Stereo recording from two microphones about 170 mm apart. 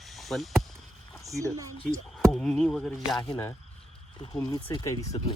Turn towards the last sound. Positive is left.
turn(degrees=20)  # may be behind; listen again after turning